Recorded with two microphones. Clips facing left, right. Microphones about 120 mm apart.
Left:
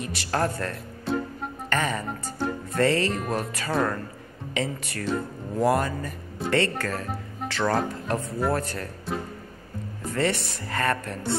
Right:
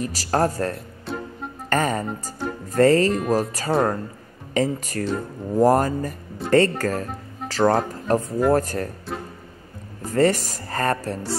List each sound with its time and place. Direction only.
0.0 s speech: 35° right (ahead or behind)
1.1 s music: centre (ahead or behind)
1.7 s speech: 40° right (ahead or behind)
9.1 s speech: centre (ahead or behind)
10.0 s speech: 40° right (ahead or behind)